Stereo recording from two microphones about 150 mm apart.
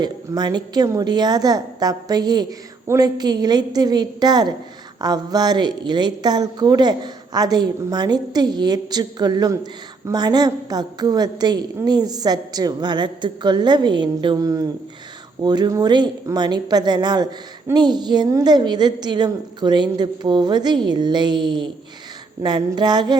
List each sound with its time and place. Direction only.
0.0 s a woman's voice: 25° right (ahead or behind)